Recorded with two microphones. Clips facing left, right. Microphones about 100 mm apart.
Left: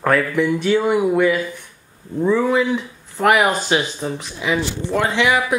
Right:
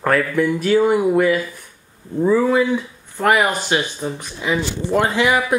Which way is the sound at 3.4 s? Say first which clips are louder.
Left 1 dB; 15° left (ahead or behind).